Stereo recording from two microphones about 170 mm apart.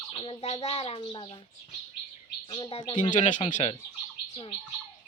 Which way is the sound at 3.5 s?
35° left (ahead or behind).